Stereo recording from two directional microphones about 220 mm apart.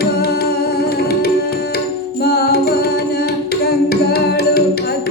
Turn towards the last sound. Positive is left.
turn(degrees=45)  # may be behind; listen again after turning